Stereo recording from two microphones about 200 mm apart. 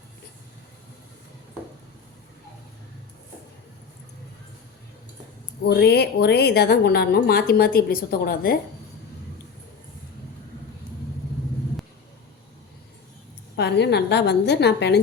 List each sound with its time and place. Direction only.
5.6 s a woman's voice: 55° left (ahead or behind)
13.6 s a woman's voice: 55° left (ahead or behind)